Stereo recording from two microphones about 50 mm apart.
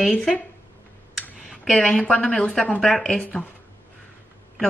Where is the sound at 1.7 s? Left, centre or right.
Centre.